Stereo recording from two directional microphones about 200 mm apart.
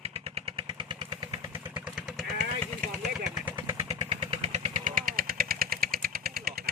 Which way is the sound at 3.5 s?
15° right (ahead or behind).